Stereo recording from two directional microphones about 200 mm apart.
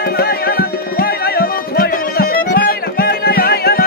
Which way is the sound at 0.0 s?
50° left (ahead or behind).